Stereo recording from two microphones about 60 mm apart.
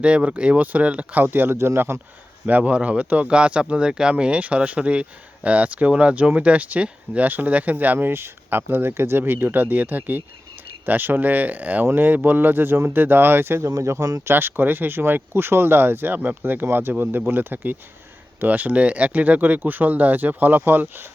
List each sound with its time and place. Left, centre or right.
0.0 s speech: centre; by 2.0 s right
2.5 s speech: right
7.9 s speech: right